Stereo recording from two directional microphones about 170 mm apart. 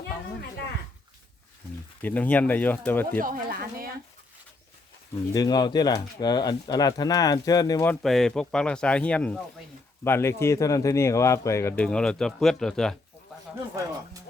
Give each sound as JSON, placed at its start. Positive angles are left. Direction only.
{"t": 2.0, "sound": "speech", "side_deg": 10}
{"t": 3.2, "sound": "speech", "side_deg": -55}
{"t": 5.3, "sound": "speech", "side_deg": 25}
{"t": 7.9, "sound": "speech", "side_deg": 0}
{"t": 11.8, "sound": "speech", "side_deg": 5}